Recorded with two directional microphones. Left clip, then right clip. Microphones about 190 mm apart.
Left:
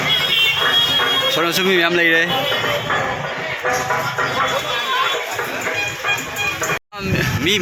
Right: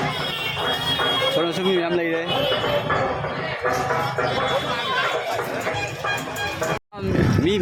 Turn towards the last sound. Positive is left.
turn(degrees=-15)  # may be behind; listen again after turning